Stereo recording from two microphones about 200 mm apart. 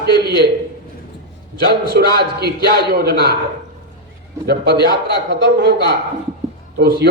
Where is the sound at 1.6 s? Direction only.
50° right (ahead or behind).